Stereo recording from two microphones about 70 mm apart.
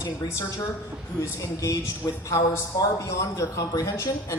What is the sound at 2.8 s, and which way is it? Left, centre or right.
Speech, left.